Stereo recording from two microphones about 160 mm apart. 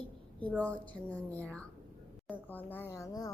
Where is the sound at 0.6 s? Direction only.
10° left (ahead or behind).